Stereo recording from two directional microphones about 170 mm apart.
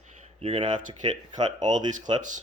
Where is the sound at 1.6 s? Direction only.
45° right (ahead or behind).